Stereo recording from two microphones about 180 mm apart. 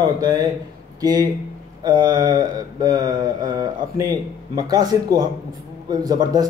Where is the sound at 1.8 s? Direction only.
20° right (ahead or behind).